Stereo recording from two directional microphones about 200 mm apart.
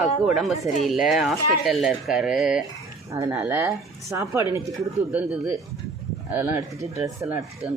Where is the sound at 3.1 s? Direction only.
15° right (ahead or behind).